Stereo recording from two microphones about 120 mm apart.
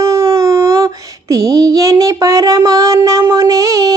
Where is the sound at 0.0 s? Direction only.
25° right (ahead or behind).